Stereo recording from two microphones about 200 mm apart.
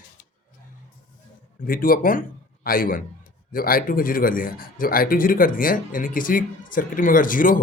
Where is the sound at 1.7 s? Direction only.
45° left (ahead or behind).